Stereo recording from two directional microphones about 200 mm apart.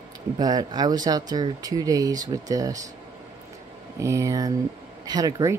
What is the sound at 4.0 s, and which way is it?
Speech, 15° right (ahead or behind).